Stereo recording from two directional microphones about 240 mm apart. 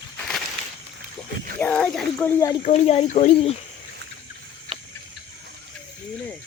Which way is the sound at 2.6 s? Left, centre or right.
Left.